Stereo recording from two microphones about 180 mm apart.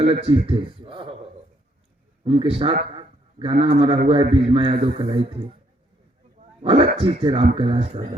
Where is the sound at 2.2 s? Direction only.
30° right (ahead or behind).